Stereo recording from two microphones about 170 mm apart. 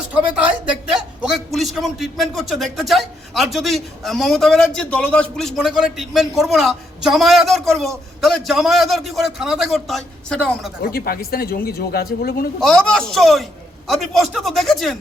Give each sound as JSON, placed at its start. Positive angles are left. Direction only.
{"t": 0.1, "sound": "a man's voice", "side_deg": -10}
{"t": 10.8, "sound": "speech", "side_deg": 60}
{"t": 12.5, "sound": "a man's voice", "side_deg": 5}